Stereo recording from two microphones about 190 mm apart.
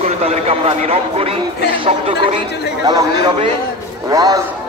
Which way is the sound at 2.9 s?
20° right (ahead or behind).